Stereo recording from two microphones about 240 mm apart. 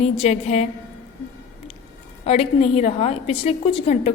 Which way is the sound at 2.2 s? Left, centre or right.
Left.